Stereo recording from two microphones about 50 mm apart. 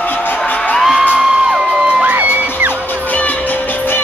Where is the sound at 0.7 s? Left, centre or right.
Centre.